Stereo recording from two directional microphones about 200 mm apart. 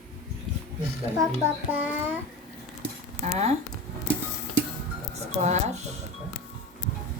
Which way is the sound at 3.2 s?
35° right (ahead or behind).